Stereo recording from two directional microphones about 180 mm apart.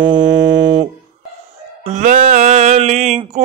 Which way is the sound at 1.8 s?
40° right (ahead or behind).